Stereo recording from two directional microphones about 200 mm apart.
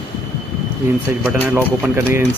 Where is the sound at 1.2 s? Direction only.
10° right (ahead or behind).